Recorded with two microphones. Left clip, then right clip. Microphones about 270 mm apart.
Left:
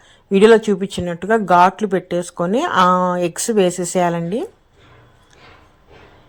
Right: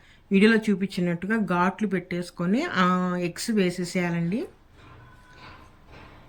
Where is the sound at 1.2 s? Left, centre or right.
Left.